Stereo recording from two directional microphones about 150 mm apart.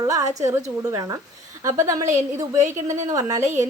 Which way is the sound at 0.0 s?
20° right (ahead or behind).